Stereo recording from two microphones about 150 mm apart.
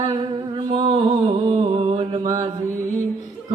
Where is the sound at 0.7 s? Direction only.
40° right (ahead or behind).